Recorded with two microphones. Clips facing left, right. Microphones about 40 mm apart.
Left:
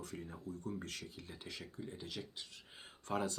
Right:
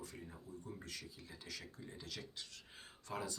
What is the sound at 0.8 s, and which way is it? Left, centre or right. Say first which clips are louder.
Speech: left 4 dB; left.